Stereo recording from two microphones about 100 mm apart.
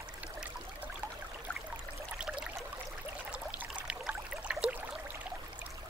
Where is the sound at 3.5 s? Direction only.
10° right (ahead or behind).